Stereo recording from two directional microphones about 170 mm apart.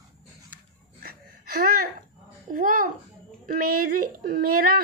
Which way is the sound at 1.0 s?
60° right (ahead or behind).